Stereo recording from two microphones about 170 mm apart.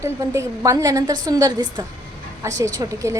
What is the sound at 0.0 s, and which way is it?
A woman's voice, 15° right (ahead or behind).